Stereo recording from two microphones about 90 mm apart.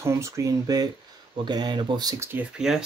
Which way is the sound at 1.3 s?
55° right (ahead or behind).